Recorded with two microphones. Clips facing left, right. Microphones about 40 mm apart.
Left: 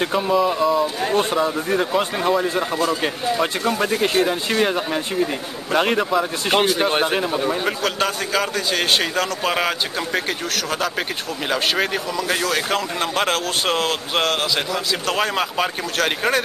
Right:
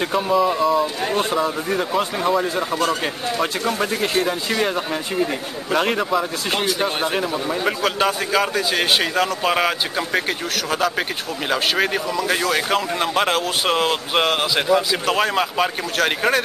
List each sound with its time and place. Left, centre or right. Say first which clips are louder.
0.0 s a man's voice: even; centre
6.8 s speech: left 2 dB; centre
7.6 s a man's voice: right 2 dB; centre